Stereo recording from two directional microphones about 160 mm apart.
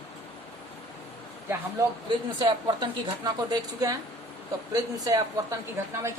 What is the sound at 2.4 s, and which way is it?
A woman's voice, 25° right (ahead or behind).